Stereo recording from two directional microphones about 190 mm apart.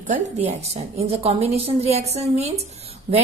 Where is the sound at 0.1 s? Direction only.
35° right (ahead or behind).